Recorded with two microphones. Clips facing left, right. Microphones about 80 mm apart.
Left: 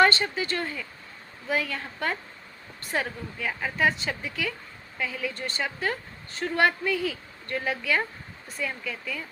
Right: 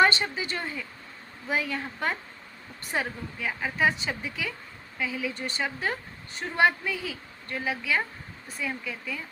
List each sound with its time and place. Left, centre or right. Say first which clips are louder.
0.0 s a woman's voice: left 1 dB; centre